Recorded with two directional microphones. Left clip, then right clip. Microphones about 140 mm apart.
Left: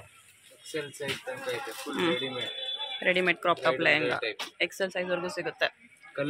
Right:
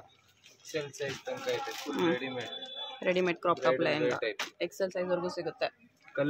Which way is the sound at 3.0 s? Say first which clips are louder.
Left 3 dB; 5° right (ahead or behind).